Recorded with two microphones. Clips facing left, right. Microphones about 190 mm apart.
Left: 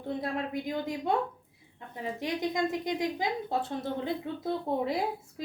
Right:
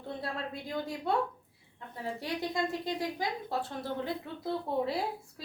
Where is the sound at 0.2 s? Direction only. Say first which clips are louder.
Left 5 dB; 15° left (ahead or behind).